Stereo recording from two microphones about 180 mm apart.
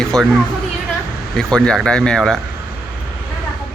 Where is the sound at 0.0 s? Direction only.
5° left (ahead or behind).